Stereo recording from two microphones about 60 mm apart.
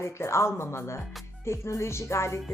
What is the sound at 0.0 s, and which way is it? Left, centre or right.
Speech, left.